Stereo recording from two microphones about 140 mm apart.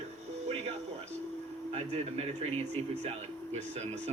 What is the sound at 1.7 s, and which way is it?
A man's voice, 45° right (ahead or behind).